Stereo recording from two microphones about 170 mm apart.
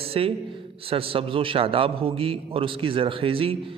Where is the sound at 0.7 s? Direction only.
35° right (ahead or behind).